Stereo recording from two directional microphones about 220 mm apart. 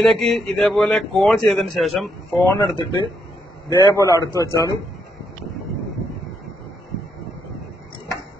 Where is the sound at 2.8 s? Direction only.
20° left (ahead or behind).